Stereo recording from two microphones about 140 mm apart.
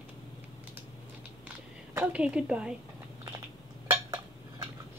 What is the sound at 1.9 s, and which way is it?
Speech, 10° right (ahead or behind).